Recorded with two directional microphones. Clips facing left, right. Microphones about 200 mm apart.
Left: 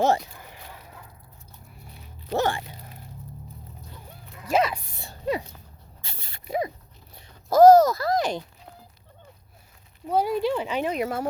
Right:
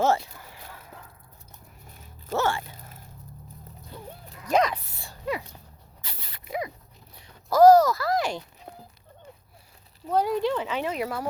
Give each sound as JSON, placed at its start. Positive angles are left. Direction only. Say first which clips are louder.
{"t": 2.3, "sound": "speech", "louder": "left 1 dB", "side_deg": 15}
{"t": 4.4, "sound": "speech", "louder": "even", "side_deg": 5}
{"t": 6.0, "sound": "zipper", "louder": "even", "side_deg": 25}
{"t": 7.5, "sound": "speech", "louder": "left 2 dB", "side_deg": 20}
{"t": 10.1, "sound": "speech", "louder": "left 1 dB", "side_deg": 10}